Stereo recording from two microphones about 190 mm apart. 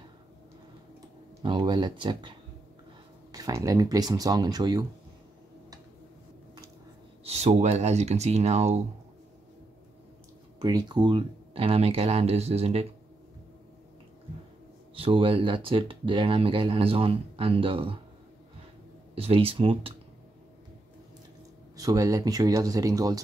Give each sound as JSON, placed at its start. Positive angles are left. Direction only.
{"t": 1.4, "sound": "speech", "side_deg": -25}
{"t": 7.2, "sound": "speech", "side_deg": -35}
{"t": 10.6, "sound": "speech", "side_deg": -20}
{"t": 15.0, "sound": "speech", "side_deg": -30}
{"t": 19.1, "sound": "speech", "side_deg": -30}
{"t": 21.7, "sound": "speech", "side_deg": -20}